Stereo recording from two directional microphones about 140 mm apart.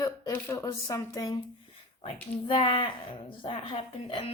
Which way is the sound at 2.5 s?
35° left (ahead or behind).